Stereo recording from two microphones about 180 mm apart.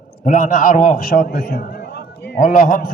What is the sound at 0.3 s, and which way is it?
A man's voice, 45° left (ahead or behind).